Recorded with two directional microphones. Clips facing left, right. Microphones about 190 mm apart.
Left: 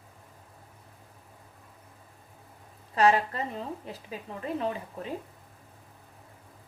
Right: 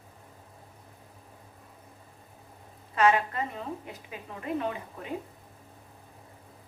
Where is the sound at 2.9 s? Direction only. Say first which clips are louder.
Left 1 dB; 35° left (ahead or behind).